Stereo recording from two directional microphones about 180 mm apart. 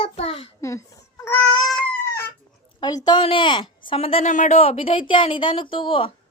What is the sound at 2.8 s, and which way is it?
A woman's voice, 25° left (ahead or behind).